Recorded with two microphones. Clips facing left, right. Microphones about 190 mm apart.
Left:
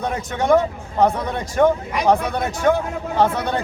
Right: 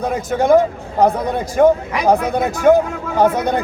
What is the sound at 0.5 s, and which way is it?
Speech, 35° right (ahead or behind).